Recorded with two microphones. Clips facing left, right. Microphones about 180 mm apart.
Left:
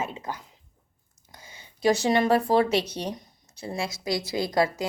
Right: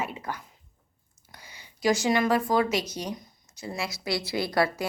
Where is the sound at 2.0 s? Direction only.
30° left (ahead or behind).